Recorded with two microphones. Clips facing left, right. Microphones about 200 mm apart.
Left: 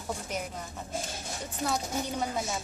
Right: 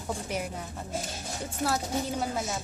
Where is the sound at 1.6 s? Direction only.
5° right (ahead or behind).